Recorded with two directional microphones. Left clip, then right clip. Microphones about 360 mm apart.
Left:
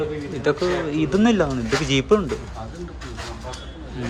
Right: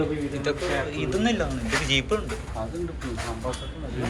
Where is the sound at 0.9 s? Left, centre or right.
Centre.